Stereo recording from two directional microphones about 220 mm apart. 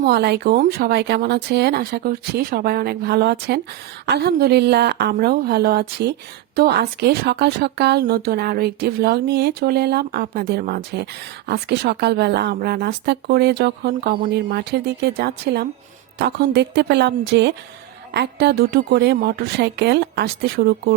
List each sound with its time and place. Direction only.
0.0 s speech: 45° right (ahead or behind)